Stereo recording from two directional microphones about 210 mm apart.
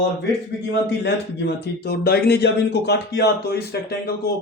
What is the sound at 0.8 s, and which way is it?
A man's voice, 55° left (ahead or behind).